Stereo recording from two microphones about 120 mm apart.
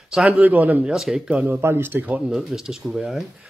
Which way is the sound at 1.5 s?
20° right (ahead or behind).